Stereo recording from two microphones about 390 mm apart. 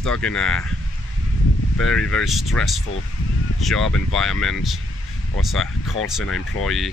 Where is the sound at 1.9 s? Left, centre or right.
Centre.